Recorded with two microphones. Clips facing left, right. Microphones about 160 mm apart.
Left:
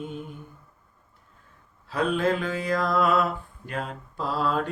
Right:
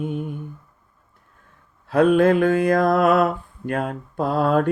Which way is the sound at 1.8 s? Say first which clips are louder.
Right 9 dB; 55° right (ahead or behind).